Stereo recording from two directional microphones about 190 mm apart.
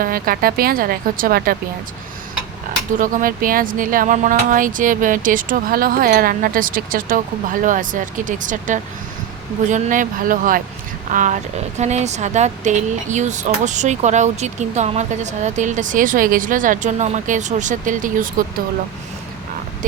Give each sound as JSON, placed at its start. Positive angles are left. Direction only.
{"t": 0.0, "sound": "speech", "side_deg": -50}
{"t": 3.0, "sound": "speech", "side_deg": -45}